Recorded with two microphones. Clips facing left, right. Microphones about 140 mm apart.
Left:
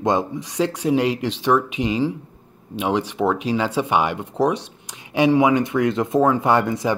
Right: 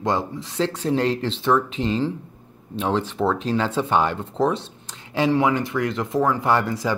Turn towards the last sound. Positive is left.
turn(degrees=20)  # may be behind; listen again after turning